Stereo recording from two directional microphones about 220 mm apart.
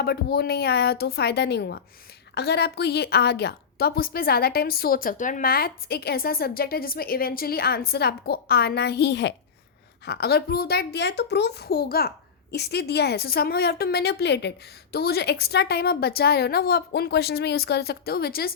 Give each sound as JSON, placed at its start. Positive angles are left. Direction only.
{"t": 0.0, "sound": "a woman's voice", "side_deg": 45}